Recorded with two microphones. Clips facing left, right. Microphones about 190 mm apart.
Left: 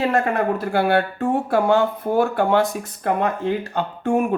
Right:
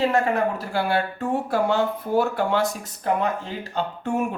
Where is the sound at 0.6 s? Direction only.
55° left (ahead or behind).